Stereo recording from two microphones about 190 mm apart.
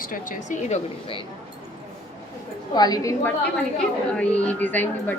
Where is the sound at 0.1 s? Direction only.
40° left (ahead or behind).